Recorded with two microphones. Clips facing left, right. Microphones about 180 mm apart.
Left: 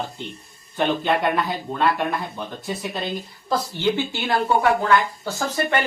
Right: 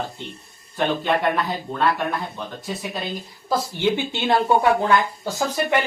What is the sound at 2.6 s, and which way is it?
Speech, centre (ahead or behind).